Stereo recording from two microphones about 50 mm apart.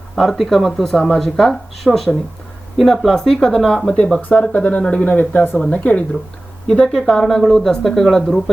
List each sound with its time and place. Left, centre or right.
0.2 s speech: centre
4.2 s speech: left
6.8 s speech: centre